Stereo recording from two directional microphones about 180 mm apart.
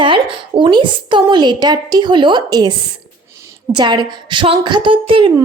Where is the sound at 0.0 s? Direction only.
30° right (ahead or behind).